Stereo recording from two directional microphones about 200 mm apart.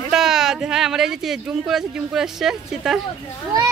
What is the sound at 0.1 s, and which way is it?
Speech, centre (ahead or behind).